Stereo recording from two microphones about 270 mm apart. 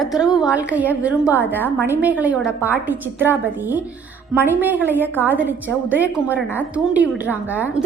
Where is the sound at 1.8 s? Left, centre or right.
Centre.